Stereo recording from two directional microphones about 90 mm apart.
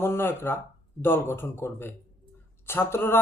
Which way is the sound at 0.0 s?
25° left (ahead or behind).